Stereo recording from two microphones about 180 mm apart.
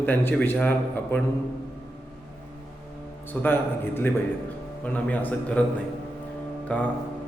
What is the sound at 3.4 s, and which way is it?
A man's voice, 10° left (ahead or behind).